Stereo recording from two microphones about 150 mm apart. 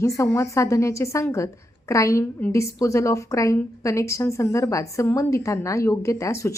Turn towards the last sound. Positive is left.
turn(degrees=20)  # may be behind; listen again after turning